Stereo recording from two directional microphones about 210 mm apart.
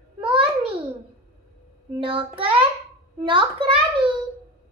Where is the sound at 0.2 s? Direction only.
25° right (ahead or behind).